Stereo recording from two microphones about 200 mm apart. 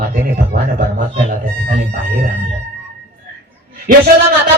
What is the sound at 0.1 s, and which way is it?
Speech, 45° right (ahead or behind).